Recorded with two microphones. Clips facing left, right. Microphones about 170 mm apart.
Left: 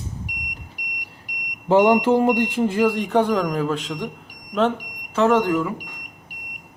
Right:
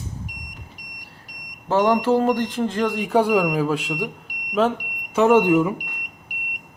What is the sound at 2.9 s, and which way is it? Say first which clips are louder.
Speech: right 1 dB; 5° right (ahead or behind).